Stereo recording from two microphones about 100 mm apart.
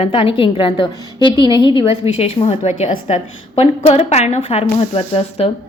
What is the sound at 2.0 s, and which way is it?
A woman's voice, 90° left.